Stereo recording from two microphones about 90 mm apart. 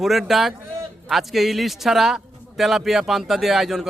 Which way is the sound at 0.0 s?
5° right (ahead or behind).